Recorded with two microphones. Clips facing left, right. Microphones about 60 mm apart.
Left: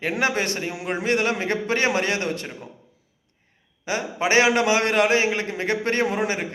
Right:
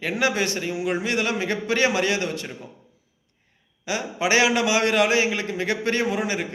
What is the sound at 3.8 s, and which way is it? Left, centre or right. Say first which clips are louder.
A man's voice: left 1 dB; left.